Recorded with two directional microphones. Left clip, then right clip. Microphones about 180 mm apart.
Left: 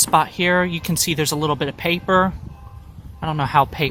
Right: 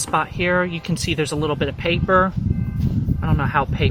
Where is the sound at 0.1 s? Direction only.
30° left (ahead or behind).